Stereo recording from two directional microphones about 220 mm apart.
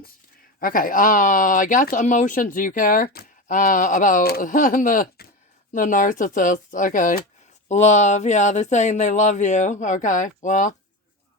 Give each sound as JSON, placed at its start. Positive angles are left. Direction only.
{"t": 0.6, "sound": "speech", "side_deg": 40}